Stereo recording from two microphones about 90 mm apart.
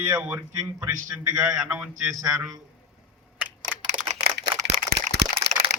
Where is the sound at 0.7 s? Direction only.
40° right (ahead or behind).